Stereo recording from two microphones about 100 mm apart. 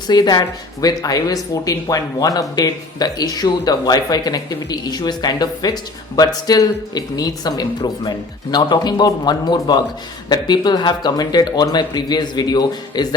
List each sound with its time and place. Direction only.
0.1 s speech: 45° left (ahead or behind)